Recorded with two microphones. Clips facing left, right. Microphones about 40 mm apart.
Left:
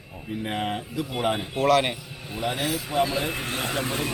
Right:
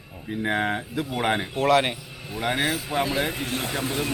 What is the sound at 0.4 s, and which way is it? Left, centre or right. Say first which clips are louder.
Speech: right 4 dB; right.